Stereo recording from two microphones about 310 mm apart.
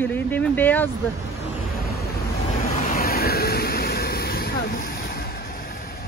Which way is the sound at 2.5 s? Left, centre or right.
Left.